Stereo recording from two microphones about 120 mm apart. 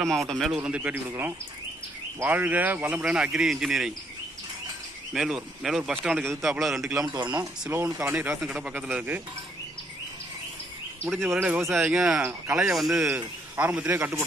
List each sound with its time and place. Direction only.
0.0 s speech: 5° left (ahead or behind)
0.6 s speech: 10° right (ahead or behind)
5.1 s speech: 5° right (ahead or behind)
7.7 s speech: 20° right (ahead or behind)
8.4 s speech: 10° right (ahead or behind)
11.1 s speech: 20° right (ahead or behind)
11.7 s speech: 5° right (ahead or behind)
12.2 s speech: 20° right (ahead or behind)
12.5 s speech: 5° right (ahead or behind)
13.1 s speech: 15° right (ahead or behind)